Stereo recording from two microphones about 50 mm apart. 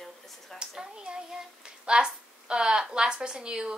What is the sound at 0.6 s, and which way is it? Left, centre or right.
A child's voice, centre.